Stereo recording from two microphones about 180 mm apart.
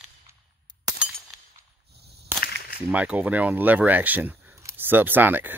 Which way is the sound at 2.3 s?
60° left (ahead or behind).